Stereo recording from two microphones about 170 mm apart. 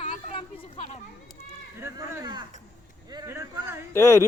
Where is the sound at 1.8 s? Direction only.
15° right (ahead or behind).